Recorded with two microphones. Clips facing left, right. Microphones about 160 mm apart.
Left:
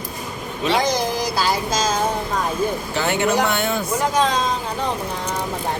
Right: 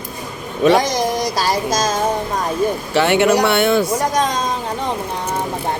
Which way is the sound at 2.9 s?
75° right (ahead or behind).